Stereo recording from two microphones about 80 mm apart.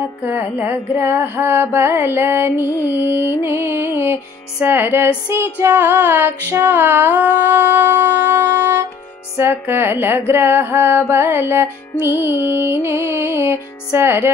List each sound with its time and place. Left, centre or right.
0.2 s music: right
9.4 s mantra: right